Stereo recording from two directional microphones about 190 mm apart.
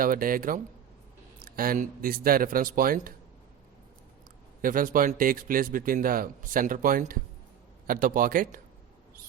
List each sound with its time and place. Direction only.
0.0 s a man's voice: 50° right (ahead or behind)
4.6 s a man's voice: 45° right (ahead or behind)